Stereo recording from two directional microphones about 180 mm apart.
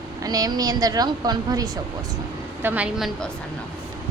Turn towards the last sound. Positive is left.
turn(degrees=-5)  # may be behind; listen again after turning